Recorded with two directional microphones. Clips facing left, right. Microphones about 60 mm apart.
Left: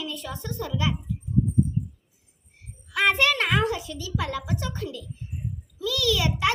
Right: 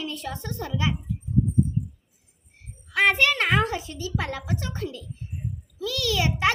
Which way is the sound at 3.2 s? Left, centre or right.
Right.